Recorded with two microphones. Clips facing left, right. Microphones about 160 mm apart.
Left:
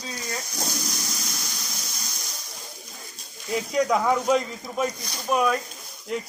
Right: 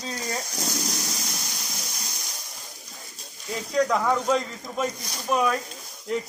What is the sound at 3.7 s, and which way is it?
Speech, 10° left (ahead or behind).